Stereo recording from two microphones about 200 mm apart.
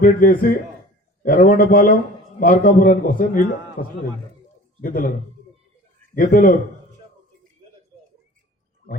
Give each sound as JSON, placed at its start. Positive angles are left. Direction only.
{"t": 0.0, "sound": "a man's voice", "side_deg": 45}
{"t": 6.1, "sound": "a man's voice", "side_deg": 45}